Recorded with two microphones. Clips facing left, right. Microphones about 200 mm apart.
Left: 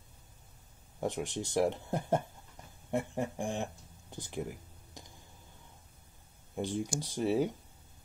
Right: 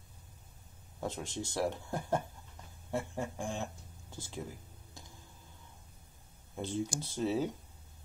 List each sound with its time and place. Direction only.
1.0 s speech: 15° left (ahead or behind)
6.5 s speech: 15° left (ahead or behind)